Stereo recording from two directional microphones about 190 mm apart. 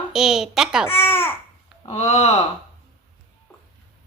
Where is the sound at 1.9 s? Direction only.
40° left (ahead or behind).